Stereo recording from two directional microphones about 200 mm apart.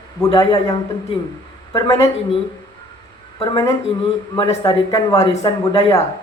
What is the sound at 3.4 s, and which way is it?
Speech, 20° left (ahead or behind).